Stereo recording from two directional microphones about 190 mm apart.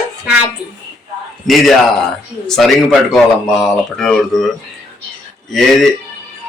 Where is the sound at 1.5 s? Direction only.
Centre (ahead or behind).